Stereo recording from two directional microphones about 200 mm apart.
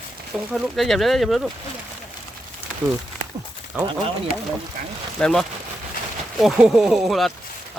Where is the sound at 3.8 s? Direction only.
25° right (ahead or behind).